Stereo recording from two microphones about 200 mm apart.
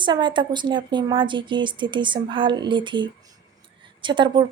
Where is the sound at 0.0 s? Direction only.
25° right (ahead or behind).